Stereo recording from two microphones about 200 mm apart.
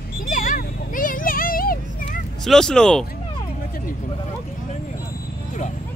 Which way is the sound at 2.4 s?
Centre (ahead or behind).